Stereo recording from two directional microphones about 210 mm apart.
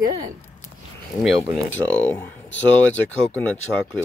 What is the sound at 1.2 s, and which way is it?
Speech, 5° left (ahead or behind).